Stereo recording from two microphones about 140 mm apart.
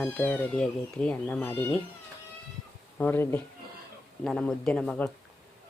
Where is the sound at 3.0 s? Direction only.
15° left (ahead or behind).